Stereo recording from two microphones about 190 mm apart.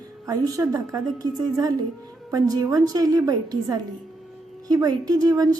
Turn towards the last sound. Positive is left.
turn(degrees=-20)  # may be behind; listen again after turning